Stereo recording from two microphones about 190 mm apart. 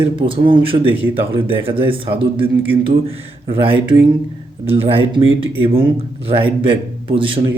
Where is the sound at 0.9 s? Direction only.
10° right (ahead or behind).